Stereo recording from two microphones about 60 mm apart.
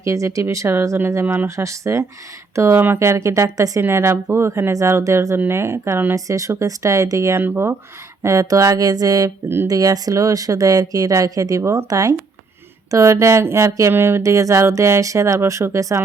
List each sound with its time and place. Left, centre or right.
0.0 s speech: right
0.7 s speech: right
1.5 s speech: right
3.8 s speech: right
4.7 s speech: right
6.1 s speech: right
7.3 s speech: right
8.2 s speech: right
11.9 s speech: right
12.9 s speech: right
13.9 s speech: right
14.2 s speech: right